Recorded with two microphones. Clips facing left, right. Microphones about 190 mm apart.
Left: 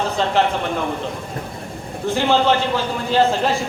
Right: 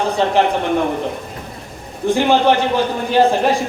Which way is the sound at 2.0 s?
15° right (ahead or behind).